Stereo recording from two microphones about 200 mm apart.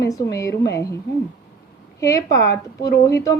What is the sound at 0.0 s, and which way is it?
Speech, 15° left (ahead or behind).